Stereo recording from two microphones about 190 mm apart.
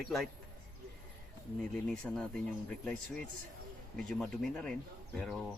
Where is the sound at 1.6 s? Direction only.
5° left (ahead or behind).